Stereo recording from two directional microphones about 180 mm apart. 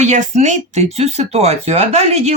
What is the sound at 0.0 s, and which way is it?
Speech, 40° right (ahead or behind).